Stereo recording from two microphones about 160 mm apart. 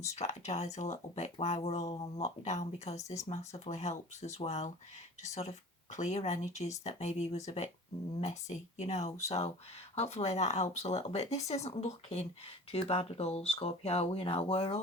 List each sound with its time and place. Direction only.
0.0 s speech: 45° left (ahead or behind)